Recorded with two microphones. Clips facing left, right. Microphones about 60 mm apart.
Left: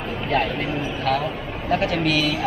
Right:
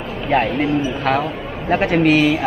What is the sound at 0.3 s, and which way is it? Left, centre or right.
A man's voice, right.